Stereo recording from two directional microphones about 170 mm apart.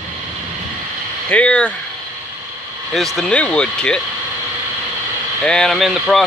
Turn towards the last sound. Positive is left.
turn(degrees=0)  # may be behind; listen again after turning